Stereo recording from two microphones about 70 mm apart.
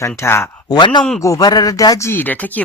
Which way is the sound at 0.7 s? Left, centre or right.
Left.